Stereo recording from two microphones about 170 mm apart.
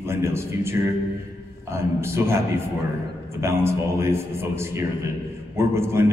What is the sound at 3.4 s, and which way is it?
A man's voice, 15° right (ahead or behind).